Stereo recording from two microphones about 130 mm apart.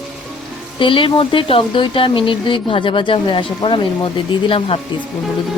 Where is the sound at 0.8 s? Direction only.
40° left (ahead or behind).